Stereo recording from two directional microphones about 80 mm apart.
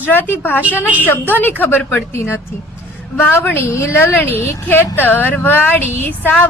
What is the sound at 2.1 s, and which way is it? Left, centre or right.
Speech, left.